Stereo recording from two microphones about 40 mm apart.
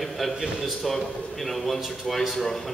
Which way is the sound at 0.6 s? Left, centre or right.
Centre.